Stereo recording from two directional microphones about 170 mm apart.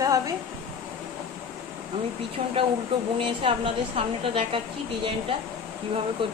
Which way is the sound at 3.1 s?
30° right (ahead or behind).